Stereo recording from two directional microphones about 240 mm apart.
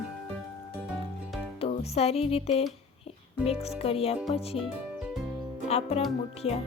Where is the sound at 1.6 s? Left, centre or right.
Left.